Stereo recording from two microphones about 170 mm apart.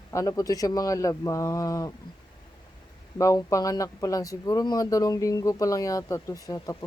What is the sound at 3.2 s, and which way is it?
Speech, 20° left (ahead or behind).